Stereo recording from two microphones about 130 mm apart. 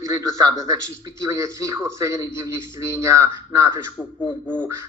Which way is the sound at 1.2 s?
25° right (ahead or behind).